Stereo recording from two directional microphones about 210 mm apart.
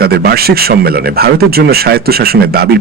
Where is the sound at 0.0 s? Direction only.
45° right (ahead or behind).